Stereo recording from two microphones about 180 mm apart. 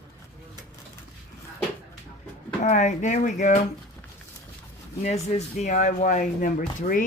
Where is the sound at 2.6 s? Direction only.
40° left (ahead or behind).